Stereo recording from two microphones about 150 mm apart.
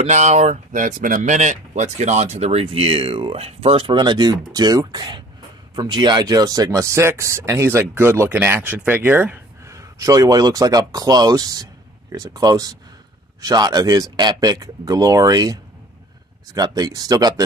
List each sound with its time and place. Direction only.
0.0 s speech: 50° right (ahead or behind); by 17.3 s 25° right (ahead or behind)